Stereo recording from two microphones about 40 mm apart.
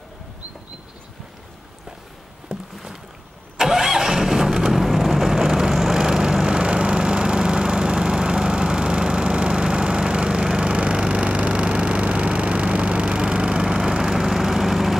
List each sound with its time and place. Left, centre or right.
2.5 s boat: centre
3.5 s vehicle: centre
11.2 s vehicle: right; by 15.0 s centre